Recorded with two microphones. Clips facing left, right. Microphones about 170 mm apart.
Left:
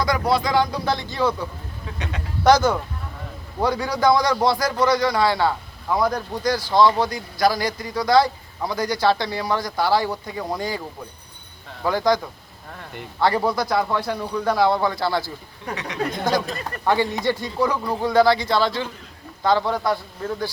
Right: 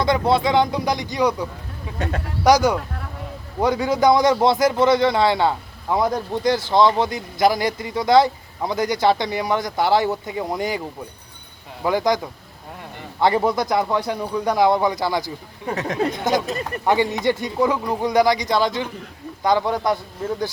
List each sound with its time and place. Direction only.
0.0 s a man's voice: 25° right (ahead or behind)
15.7 s speech: 45° right (ahead or behind)
16.0 s a man's voice: 20° right (ahead or behind)